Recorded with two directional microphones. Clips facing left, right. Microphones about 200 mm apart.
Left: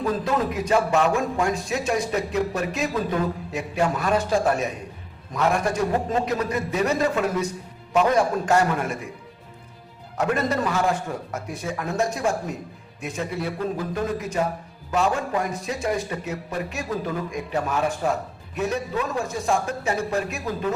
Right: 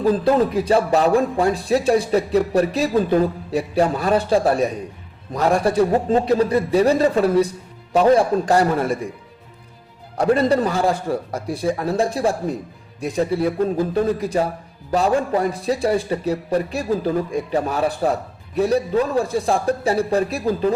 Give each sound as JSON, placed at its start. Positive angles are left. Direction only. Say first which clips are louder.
{"t": 0.0, "sound": "a man's voice", "louder": "right 7 dB", "side_deg": -30}
{"t": 10.2, "sound": "a man's voice", "louder": "right 7 dB", "side_deg": -35}